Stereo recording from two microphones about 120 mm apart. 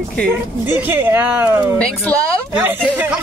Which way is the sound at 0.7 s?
15° right (ahead or behind).